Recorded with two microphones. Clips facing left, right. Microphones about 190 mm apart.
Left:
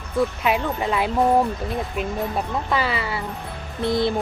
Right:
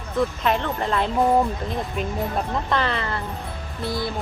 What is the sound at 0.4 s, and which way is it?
Speech, 10° left (ahead or behind).